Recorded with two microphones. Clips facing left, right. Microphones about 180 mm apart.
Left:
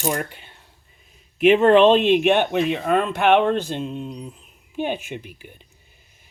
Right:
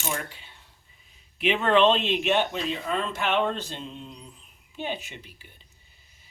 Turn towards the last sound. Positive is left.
turn(degrees=50)  # may be behind; listen again after turning